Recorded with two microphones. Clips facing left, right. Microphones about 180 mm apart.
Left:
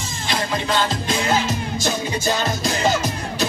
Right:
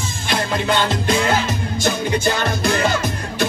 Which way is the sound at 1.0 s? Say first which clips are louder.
Right 2 dB; 60° right (ahead or behind).